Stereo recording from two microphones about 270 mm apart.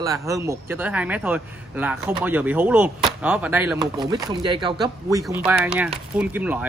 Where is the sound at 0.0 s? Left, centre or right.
Centre.